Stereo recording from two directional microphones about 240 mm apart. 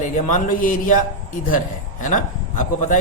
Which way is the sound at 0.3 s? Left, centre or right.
Left.